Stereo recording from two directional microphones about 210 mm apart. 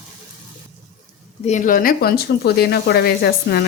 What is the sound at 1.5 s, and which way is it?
Speech, 40° left (ahead or behind).